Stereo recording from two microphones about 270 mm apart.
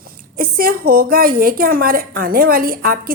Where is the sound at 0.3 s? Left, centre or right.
Right.